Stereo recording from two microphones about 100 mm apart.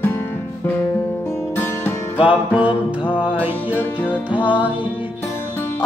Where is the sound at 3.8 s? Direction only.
15° left (ahead or behind).